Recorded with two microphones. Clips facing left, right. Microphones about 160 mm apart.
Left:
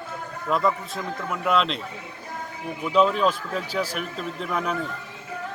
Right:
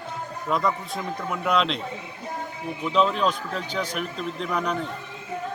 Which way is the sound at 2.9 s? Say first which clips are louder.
Left 2 dB; 5° left (ahead or behind).